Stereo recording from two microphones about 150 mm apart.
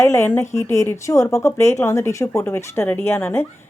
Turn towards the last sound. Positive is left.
turn(degrees=15)  # may be behind; listen again after turning